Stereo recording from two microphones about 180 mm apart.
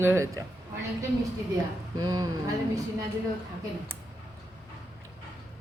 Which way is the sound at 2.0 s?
20° right (ahead or behind).